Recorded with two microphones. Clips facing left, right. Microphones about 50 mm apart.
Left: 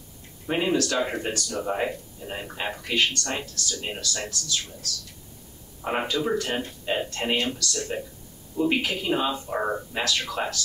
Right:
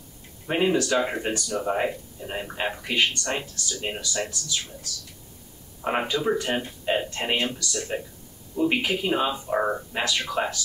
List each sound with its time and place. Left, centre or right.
0.5 s a man's voice: centre